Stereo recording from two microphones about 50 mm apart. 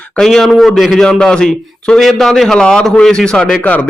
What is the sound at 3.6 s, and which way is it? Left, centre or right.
Speech, left.